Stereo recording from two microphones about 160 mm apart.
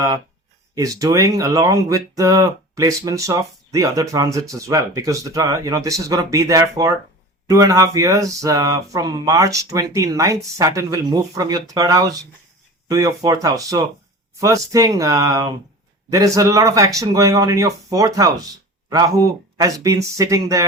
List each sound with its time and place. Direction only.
0.8 s speech: 20° right (ahead or behind)